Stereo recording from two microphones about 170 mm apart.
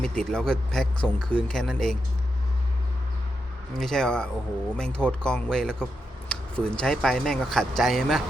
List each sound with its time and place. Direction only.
0.0 s speech: 5° left (ahead or behind)
3.8 s speech: 5° left (ahead or behind)